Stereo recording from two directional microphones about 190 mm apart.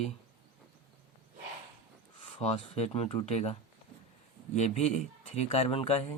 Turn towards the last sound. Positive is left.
turn(degrees=30)  # may be behind; listen again after turning